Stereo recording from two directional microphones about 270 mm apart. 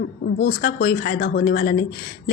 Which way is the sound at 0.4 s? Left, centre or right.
Left.